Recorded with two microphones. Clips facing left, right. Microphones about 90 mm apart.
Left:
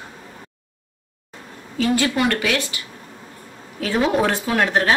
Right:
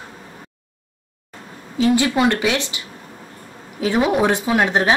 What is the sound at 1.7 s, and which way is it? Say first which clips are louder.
Speech: right 3 dB; 20° right (ahead or behind).